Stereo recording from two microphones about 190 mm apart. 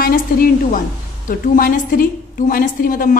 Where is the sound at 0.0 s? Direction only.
50° left (ahead or behind).